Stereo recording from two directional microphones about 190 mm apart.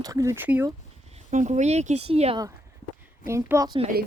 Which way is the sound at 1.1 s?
40° right (ahead or behind).